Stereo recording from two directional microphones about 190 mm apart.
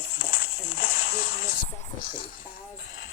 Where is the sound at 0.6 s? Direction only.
55° left (ahead or behind).